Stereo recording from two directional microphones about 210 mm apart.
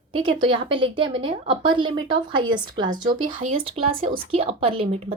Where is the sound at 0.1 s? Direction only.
25° right (ahead or behind).